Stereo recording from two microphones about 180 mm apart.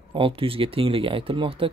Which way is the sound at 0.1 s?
30° right (ahead or behind).